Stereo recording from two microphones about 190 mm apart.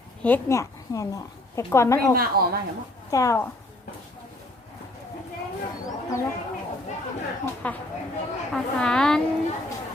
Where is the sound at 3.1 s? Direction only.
15° left (ahead or behind).